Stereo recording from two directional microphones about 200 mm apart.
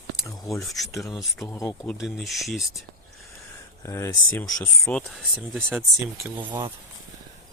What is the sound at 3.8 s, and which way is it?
Speech, 15° left (ahead or behind).